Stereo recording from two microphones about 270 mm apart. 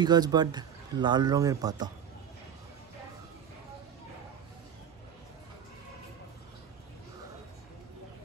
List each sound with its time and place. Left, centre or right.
0.0 s speech: centre